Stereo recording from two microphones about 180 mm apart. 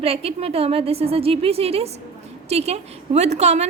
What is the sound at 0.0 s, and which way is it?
A woman's voice, 35° right (ahead or behind).